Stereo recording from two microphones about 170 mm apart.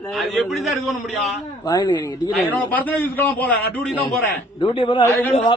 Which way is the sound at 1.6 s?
25° left (ahead or behind).